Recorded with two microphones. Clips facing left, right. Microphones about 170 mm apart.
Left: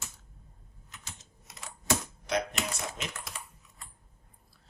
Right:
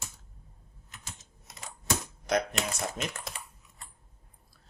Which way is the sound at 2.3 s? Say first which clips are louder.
Right 3 dB; 45° right (ahead or behind).